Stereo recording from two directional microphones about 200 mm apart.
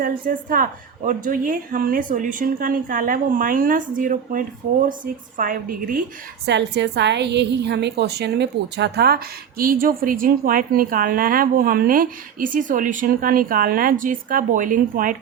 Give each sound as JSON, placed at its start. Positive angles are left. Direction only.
{"t": 0.0, "sound": "a woman's voice", "side_deg": -45}
{"t": 6.4, "sound": "a woman's voice", "side_deg": -60}